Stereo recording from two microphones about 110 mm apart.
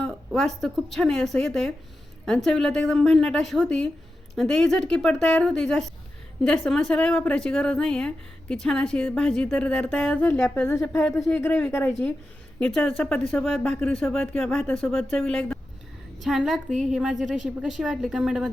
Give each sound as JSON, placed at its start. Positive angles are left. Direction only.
{"t": 0.3, "sound": "a woman's voice", "side_deg": 5}
{"t": 12.5, "sound": "speech", "side_deg": 10}